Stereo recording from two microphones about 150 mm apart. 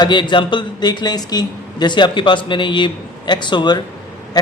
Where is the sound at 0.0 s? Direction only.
30° left (ahead or behind).